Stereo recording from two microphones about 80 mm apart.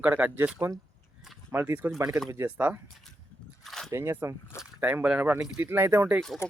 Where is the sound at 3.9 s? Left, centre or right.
Right.